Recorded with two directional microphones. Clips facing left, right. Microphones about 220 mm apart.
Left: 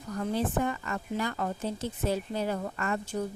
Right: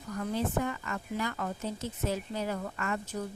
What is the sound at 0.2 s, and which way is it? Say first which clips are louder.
Speech: left 2 dB; 35° left (ahead or behind).